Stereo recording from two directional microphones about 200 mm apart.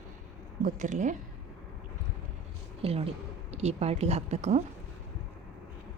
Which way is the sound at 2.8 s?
30° right (ahead or behind).